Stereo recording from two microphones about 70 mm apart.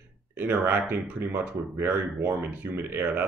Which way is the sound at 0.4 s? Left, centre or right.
Right.